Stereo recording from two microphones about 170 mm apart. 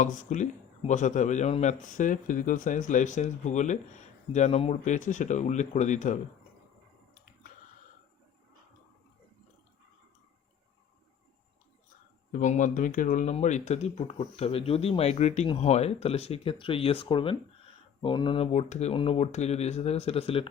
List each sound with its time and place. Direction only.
0.0 s speech: 45° left (ahead or behind)
12.3 s speech: 50° left (ahead or behind)